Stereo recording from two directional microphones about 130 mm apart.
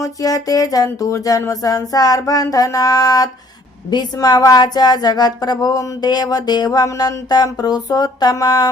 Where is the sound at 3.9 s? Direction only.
30° left (ahead or behind).